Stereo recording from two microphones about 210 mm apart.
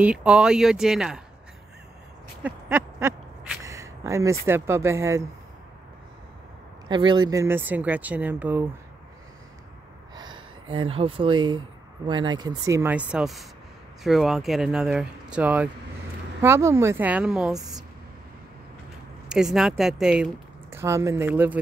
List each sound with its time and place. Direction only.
0.0 s speech: 5° right (ahead or behind)
2.4 s speech: 10° right (ahead or behind)
6.9 s speech: 20° right (ahead or behind)
10.1 s speech: 20° right (ahead or behind); by 17.6 s centre (ahead or behind)
19.2 s speech: 5° right (ahead or behind)